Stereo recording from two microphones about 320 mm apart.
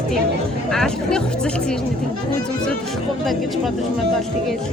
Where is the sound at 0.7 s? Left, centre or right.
Centre.